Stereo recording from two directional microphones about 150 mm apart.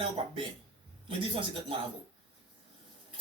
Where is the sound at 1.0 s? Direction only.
35° right (ahead or behind).